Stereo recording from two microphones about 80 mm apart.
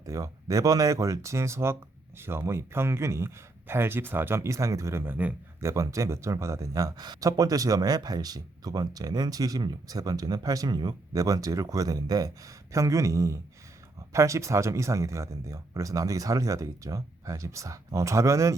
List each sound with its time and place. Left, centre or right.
0.0 s speech: right
5.5 s speech: right